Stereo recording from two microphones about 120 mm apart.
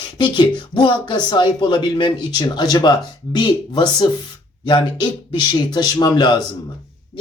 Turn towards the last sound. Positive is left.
turn(degrees=35)  # may be behind; listen again after turning